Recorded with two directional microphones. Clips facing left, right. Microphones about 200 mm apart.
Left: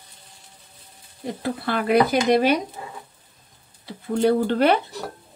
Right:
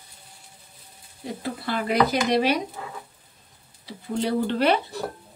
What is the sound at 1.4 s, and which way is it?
A woman's voice, 60° left (ahead or behind).